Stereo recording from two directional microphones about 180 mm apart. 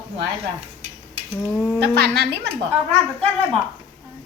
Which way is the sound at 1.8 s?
70° right (ahead or behind).